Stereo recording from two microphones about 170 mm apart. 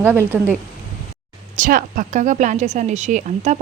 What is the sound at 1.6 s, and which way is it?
A woman's voice, 50° right (ahead or behind).